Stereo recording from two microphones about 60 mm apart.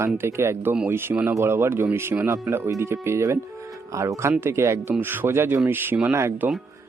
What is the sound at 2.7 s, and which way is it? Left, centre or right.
A man's voice, right.